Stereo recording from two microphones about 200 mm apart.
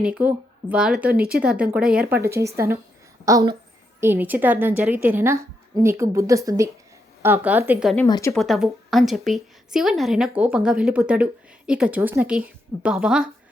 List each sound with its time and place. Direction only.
0.0 s a woman's voice: 5° right (ahead or behind)
7.9 s a woman's voice: 15° left (ahead or behind)
8.3 s a woman's voice: centre (ahead or behind)